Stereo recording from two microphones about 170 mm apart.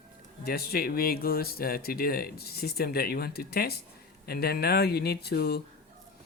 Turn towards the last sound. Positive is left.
turn(degrees=70)  # may be behind; listen again after turning